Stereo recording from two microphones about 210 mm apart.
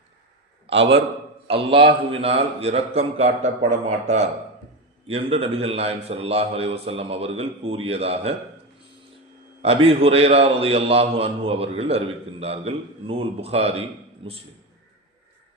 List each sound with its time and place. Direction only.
0.7 s a man's voice: 60° right (ahead or behind)
1.5 s a man's voice: 25° right (ahead or behind)
9.6 s a man's voice: 25° right (ahead or behind)